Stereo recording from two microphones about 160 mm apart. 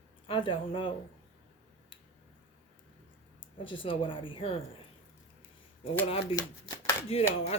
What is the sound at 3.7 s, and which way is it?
Speech, 30° left (ahead or behind).